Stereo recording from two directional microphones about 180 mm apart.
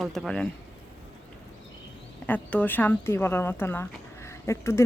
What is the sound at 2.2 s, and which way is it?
Speech, 10° left (ahead or behind).